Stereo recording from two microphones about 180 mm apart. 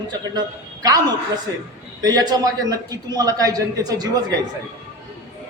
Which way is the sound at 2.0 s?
20° right (ahead or behind).